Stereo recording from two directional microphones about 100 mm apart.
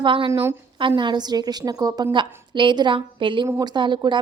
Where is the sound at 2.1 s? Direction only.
55° right (ahead or behind).